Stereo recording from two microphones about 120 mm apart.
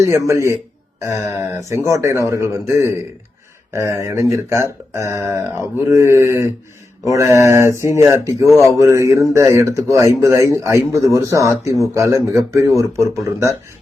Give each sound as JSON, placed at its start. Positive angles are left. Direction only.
{"t": 0.3, "sound": "speech", "side_deg": -25}